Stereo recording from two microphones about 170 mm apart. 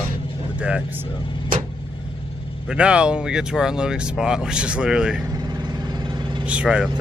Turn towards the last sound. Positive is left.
turn(degrees=-5)  # may be behind; listen again after turning